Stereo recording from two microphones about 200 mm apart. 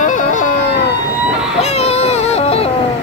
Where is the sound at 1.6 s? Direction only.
30° left (ahead or behind).